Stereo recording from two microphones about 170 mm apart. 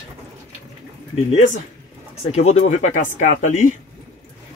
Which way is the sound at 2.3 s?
40° left (ahead or behind).